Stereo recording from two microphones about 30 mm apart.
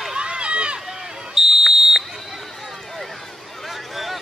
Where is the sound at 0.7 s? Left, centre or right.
Centre.